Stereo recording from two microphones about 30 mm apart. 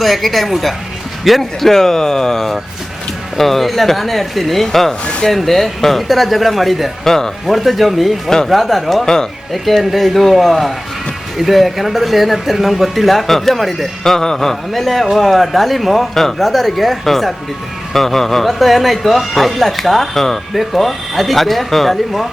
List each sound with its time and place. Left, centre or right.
0.0 s speech: centre
7.0 s speech: centre
7.4 s speech: centre
14.0 s speech: centre